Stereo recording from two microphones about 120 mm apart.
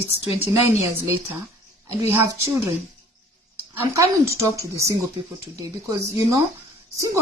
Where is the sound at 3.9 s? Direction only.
25° right (ahead or behind).